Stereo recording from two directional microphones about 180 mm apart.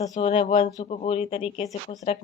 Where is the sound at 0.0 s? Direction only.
35° left (ahead or behind).